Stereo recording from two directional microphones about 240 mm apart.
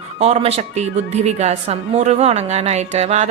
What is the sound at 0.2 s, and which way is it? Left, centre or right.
A woman's voice, right.